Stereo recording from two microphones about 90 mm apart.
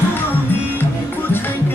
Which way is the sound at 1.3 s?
25° left (ahead or behind).